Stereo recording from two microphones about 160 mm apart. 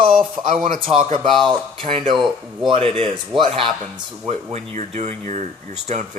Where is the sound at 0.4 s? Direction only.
55° right (ahead or behind).